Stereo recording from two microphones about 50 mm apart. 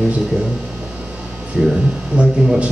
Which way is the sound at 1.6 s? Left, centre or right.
Centre.